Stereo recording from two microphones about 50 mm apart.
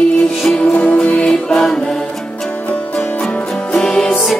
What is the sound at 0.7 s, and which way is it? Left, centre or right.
Music, left.